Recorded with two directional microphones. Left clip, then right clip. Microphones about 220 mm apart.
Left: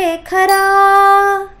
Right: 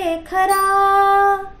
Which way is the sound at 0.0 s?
40° left (ahead or behind).